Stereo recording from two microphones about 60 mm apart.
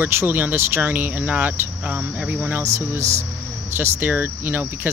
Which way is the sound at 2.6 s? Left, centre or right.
Right.